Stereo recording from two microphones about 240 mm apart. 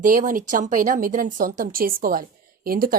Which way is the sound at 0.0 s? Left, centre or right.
Right.